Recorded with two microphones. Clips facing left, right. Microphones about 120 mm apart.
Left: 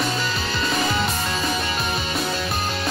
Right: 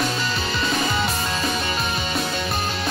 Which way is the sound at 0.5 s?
Centre (ahead or behind).